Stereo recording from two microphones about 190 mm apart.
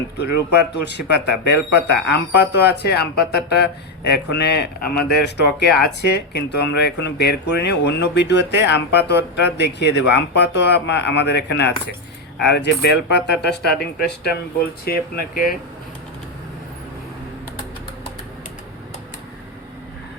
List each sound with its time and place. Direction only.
0.2 s speech: 60° left (ahead or behind)
14.8 s speech: 50° left (ahead or behind)